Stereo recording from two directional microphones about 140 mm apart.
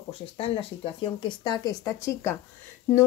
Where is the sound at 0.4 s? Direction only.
40° left (ahead or behind).